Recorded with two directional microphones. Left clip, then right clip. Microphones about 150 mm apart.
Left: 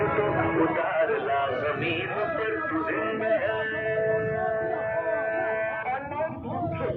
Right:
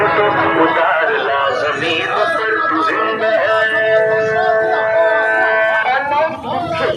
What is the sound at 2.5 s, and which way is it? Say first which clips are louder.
Music: right 13 dB; 55° right (ahead or behind).